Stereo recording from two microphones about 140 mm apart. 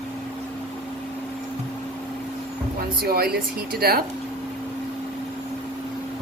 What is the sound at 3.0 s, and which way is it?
Speech, 90° right.